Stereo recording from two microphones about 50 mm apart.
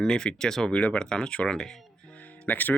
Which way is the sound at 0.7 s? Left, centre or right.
Left.